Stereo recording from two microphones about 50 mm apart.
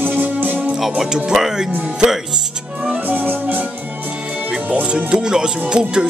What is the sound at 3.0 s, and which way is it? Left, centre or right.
Music, right.